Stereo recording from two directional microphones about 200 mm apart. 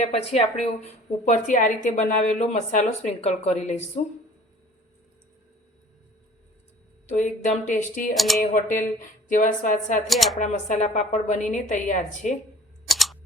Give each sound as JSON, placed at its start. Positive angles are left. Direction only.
{"t": 0.0, "sound": "a woman's voice", "side_deg": 30}
{"t": 7.1, "sound": "a woman's voice", "side_deg": 40}
{"t": 8.1, "sound": "speech", "side_deg": 0}
{"t": 9.3, "sound": "a woman's voice", "side_deg": 40}
{"t": 10.1, "sound": "speech", "side_deg": 0}
{"t": 10.3, "sound": "a woman's voice", "side_deg": 35}
{"t": 12.9, "sound": "a sound", "side_deg": 0}